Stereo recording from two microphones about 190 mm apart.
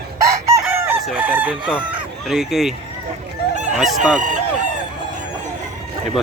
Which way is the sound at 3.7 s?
Centre (ahead or behind).